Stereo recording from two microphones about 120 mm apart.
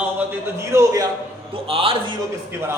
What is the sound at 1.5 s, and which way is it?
Speech, 50° right (ahead or behind).